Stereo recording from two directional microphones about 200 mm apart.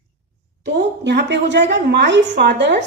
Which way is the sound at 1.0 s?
60° right (ahead or behind).